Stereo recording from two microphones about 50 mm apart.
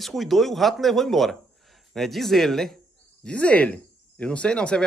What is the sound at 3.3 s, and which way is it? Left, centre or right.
Speech, left.